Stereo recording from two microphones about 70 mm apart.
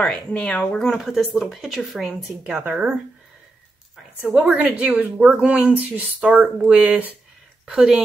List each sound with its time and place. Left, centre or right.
0.0 s speech: centre
2.6 s speech: centre
4.4 s speech: centre